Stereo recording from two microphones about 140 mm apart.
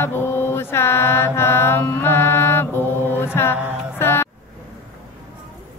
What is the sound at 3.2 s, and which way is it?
Music, 15° left (ahead or behind).